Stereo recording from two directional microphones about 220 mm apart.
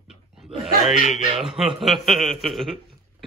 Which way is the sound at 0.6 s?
Centre (ahead or behind).